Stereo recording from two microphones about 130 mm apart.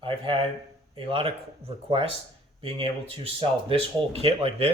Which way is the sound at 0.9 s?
45° right (ahead or behind).